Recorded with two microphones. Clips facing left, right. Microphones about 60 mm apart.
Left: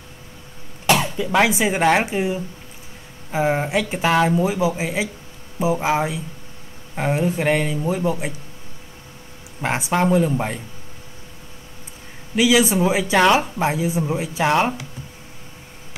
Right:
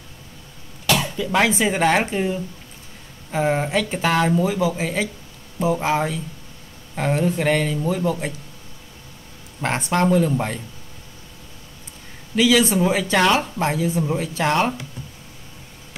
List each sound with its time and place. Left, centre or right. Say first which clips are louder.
0.8 s speech: left 3 dB; left
9.6 s speech: even; centre
12.4 s speech: even; centre